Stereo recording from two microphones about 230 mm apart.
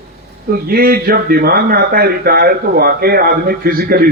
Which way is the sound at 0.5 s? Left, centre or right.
Right.